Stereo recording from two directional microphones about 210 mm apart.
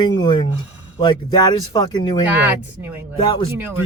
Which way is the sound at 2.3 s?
10° right (ahead or behind).